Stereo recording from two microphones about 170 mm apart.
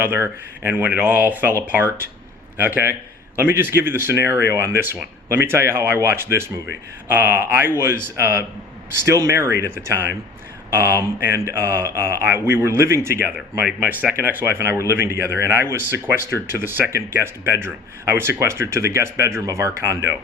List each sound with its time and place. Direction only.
0.0 s speech: 10° right (ahead or behind)
10.7 s speech: 15° right (ahead or behind)